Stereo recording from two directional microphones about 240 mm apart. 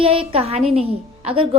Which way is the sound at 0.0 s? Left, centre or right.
Right.